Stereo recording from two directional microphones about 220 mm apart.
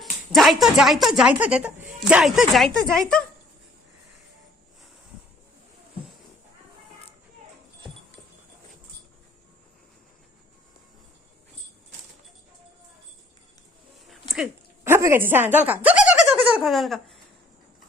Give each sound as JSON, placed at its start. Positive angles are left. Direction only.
{"t": 0.0, "sound": "a woman's voice", "side_deg": 0}
{"t": 14.8, "sound": "speech", "side_deg": -10}